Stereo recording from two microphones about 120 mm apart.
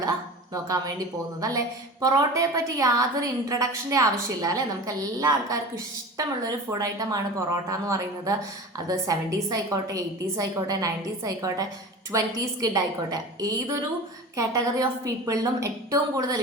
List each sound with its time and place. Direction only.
0.5 s a woman's voice: 30° right (ahead or behind)